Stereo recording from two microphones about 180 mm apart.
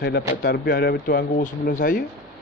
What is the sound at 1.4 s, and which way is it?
Speech, 50° left (ahead or behind).